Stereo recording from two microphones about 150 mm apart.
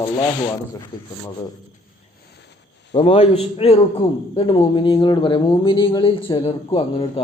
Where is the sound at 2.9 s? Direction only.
35° left (ahead or behind).